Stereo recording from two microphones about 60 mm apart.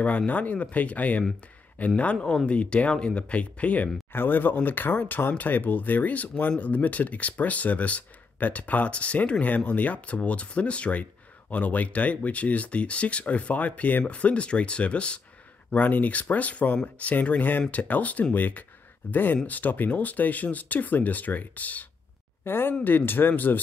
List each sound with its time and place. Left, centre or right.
0.3 s speech: left
4.1 s speech: left
22.4 s speech: left